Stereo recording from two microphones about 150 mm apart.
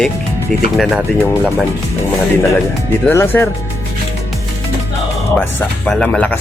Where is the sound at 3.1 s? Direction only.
15° left (ahead or behind).